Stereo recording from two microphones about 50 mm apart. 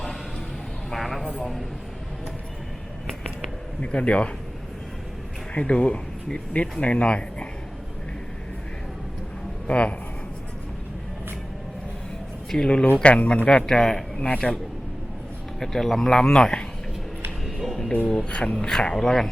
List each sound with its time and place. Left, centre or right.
0.9 s a sound: centre
3.8 s speech: left
5.5 s speech: centre
9.6 s speech: left
12.6 s speech: left
13.7 s speech: centre
14.3 s speech: left
15.6 s speech: centre
17.4 s music: centre
18.1 s speech: centre